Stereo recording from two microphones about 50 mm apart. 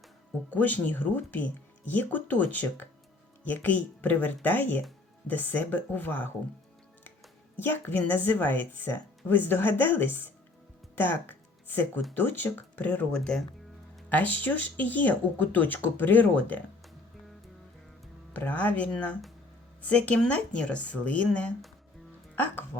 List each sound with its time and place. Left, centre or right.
0.5 s speech: left
7.6 s speech: left
13.1 s speech: centre
14.1 s speech: left
18.3 s speech: left